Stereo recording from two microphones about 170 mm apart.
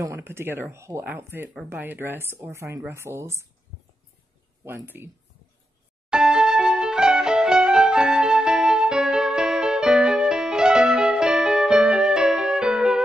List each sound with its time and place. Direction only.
0.0 s speech: 15° right (ahead or behind)
4.6 s speech: 15° right (ahead or behind)
6.0 s music: 5° right (ahead or behind)